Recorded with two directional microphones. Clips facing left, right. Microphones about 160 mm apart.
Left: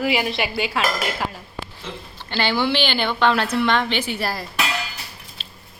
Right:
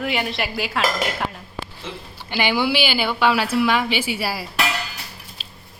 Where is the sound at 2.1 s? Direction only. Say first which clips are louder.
Right 1 dB; 10° right (ahead or behind).